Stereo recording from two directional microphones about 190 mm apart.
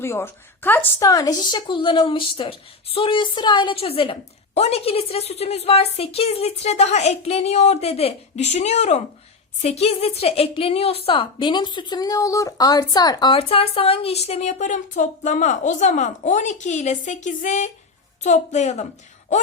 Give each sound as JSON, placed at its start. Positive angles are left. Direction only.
{"t": 0.0, "sound": "a woman's voice", "side_deg": 15}